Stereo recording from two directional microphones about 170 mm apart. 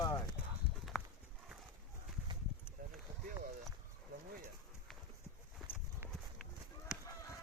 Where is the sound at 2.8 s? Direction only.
55° right (ahead or behind).